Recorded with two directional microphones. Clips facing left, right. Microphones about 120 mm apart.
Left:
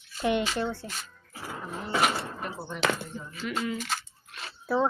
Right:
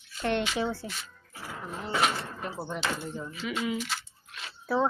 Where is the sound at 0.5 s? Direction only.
5° right (ahead or behind).